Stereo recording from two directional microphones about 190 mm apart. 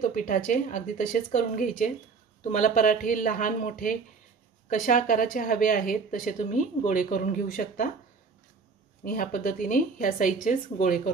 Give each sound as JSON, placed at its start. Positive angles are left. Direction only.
{"t": 0.0, "sound": "speech", "side_deg": 45}
{"t": 9.0, "sound": "speech", "side_deg": 45}